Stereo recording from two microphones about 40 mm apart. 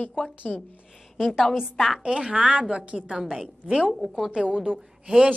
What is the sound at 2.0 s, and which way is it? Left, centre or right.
A woman's voice, right.